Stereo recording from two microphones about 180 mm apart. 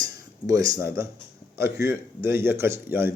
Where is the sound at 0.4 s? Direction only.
20° right (ahead or behind).